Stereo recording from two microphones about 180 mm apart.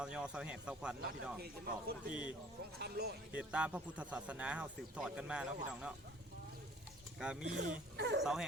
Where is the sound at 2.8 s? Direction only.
60° right (ahead or behind).